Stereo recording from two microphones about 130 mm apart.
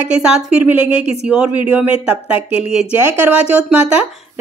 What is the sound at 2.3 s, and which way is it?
Speech, 55° left (ahead or behind).